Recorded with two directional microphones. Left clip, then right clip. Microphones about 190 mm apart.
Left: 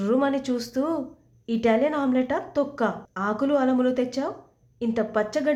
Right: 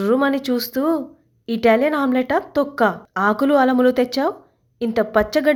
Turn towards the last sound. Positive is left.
turn(degrees=-35)  # may be behind; listen again after turning